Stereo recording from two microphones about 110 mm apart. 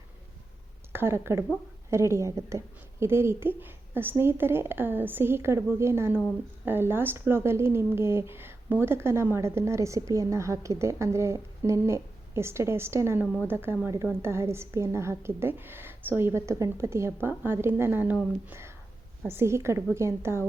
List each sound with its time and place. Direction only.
0.9 s speech: 20° right (ahead or behind)